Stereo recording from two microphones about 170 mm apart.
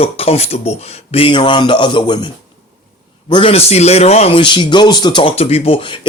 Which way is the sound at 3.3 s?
35° left (ahead or behind).